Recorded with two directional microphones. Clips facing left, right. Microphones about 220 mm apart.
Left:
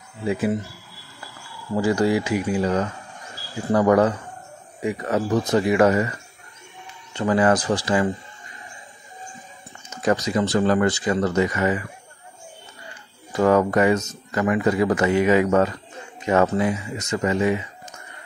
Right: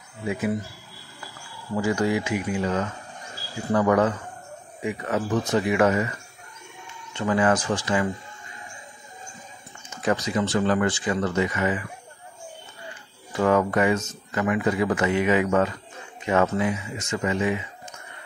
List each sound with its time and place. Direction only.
0.3 s speech: 30° left (ahead or behind)
1.8 s speech: 35° left (ahead or behind)
7.2 s speech: 35° left (ahead or behind)
10.0 s speech: 40° left (ahead or behind)
13.4 s speech: 40° left (ahead or behind)